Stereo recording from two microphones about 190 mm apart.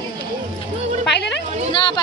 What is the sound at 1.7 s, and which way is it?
Speech, 25° left (ahead or behind).